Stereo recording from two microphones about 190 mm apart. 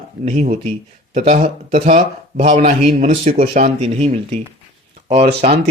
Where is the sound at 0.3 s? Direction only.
35° right (ahead or behind).